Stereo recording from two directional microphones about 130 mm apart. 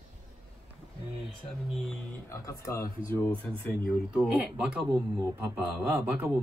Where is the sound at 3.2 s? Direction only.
10° left (ahead or behind).